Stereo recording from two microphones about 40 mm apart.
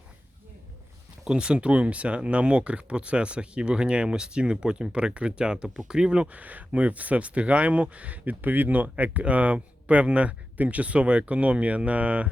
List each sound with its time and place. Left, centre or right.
1.2 s speech: right
6.2 s speech: right